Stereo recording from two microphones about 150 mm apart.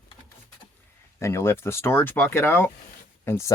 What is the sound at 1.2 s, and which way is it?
Speech, 20° left (ahead or behind).